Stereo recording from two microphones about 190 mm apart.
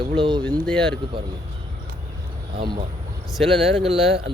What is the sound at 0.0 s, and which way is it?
Speech, 30° right (ahead or behind).